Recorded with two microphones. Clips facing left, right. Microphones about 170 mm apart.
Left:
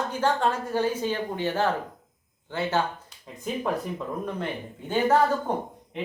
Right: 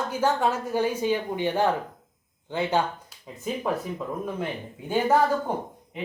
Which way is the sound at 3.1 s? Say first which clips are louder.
Right 1 dB; 5° right (ahead or behind).